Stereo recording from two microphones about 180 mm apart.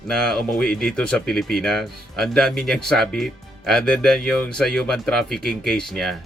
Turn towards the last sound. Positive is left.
turn(degrees=0)  # may be behind; listen again after turning